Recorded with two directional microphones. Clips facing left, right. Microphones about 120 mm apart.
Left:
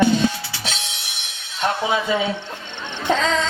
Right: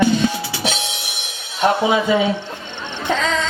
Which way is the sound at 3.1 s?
30° left (ahead or behind).